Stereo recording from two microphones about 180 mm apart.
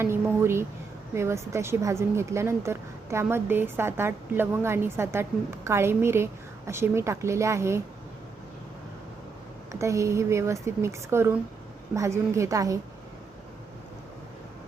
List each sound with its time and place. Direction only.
0.0 s a sound: 15° right (ahead or behind)
1.1 s speech: 15° right (ahead or behind)
9.7 s speech: 15° right (ahead or behind)